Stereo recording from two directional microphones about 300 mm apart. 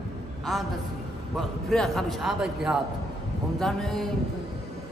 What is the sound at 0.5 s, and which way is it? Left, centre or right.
Speech, centre.